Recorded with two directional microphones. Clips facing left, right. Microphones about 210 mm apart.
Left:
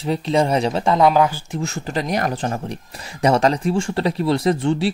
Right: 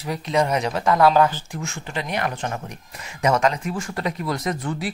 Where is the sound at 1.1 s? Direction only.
10° left (ahead or behind).